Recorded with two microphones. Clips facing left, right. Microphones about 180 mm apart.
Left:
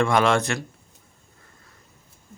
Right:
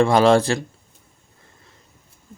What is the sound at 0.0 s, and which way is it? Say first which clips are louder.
Speech: right 5 dB; 30° right (ahead or behind).